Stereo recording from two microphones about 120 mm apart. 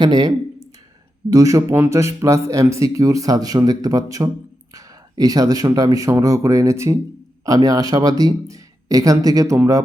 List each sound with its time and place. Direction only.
0.0 s speech: 35° right (ahead or behind)